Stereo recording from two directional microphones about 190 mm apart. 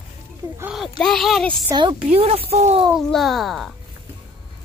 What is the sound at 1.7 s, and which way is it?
A woman's voice, 25° right (ahead or behind).